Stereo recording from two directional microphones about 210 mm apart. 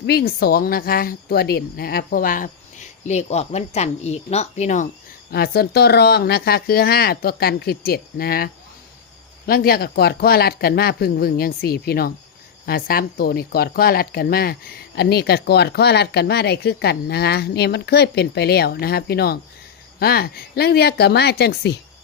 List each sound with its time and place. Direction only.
0.0 s speech: 50° left (ahead or behind)
5.3 s speech: 50° left (ahead or behind)
9.5 s speech: 45° left (ahead or behind)